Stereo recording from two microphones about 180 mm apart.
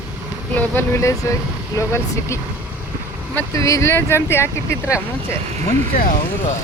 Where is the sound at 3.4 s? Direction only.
20° left (ahead or behind).